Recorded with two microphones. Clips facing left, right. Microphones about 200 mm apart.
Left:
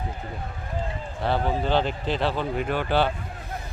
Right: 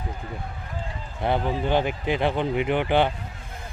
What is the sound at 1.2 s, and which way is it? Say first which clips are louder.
Speech: right 1 dB; 15° right (ahead or behind).